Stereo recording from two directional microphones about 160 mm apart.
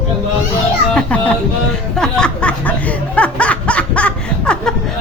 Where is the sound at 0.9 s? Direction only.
5° left (ahead or behind).